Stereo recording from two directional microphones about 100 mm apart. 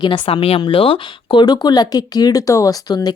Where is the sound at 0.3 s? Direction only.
75° left (ahead or behind).